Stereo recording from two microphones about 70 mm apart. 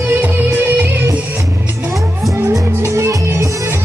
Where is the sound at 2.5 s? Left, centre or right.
Right.